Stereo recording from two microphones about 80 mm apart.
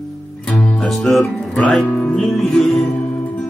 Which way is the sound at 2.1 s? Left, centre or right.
Centre.